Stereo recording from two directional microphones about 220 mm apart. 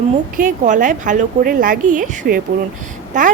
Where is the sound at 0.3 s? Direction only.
35° right (ahead or behind).